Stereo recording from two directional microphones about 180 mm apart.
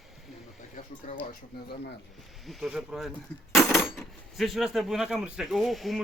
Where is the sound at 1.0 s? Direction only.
40° left (ahead or behind).